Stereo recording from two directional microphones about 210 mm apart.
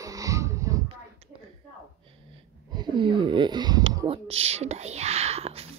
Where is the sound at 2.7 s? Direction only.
20° right (ahead or behind).